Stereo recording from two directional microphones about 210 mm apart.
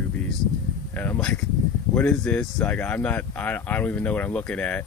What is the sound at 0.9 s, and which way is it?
Speech, 10° left (ahead or behind).